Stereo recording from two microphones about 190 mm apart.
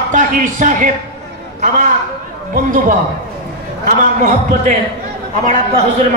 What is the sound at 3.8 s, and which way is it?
Speech, 40° right (ahead or behind).